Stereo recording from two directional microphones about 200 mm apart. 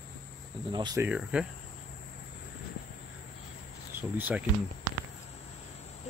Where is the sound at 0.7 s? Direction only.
20° right (ahead or behind).